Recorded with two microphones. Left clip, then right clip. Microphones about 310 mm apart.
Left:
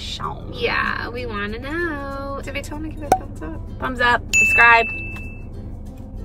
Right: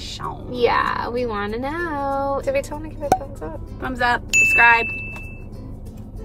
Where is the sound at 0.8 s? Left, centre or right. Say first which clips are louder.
Right 2 dB; centre.